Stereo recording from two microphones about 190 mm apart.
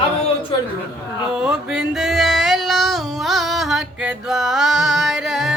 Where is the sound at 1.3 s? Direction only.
5° right (ahead or behind).